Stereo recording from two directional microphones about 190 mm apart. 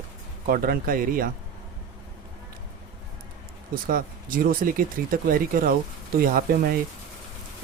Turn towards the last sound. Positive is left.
turn(degrees=-50)  # may be behind; listen again after turning